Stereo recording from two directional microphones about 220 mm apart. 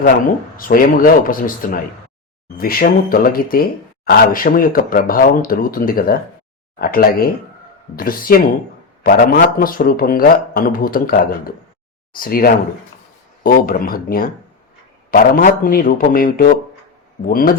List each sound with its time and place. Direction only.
0.5 s speech: 40° left (ahead or behind)